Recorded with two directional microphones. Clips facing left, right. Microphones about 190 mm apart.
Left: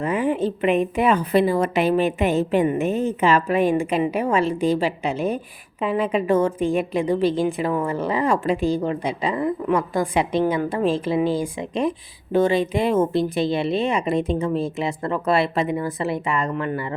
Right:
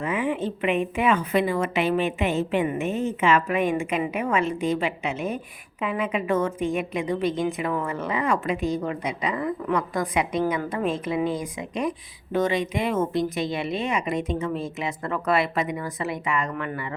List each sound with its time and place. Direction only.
0.0 s a woman's voice: 40° left (ahead or behind)